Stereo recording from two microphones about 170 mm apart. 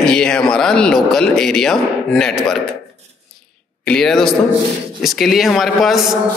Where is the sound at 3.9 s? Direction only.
5° left (ahead or behind).